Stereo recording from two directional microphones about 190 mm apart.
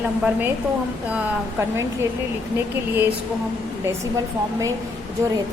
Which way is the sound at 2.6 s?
10° right (ahead or behind).